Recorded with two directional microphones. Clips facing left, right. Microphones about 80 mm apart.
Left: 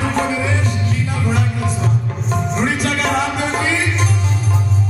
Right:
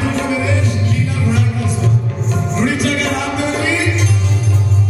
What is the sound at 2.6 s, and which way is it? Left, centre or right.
Music, left.